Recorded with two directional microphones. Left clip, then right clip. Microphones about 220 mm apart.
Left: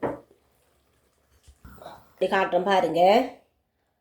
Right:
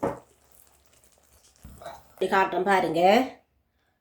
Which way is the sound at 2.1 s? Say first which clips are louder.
Left 1 dB; centre (ahead or behind).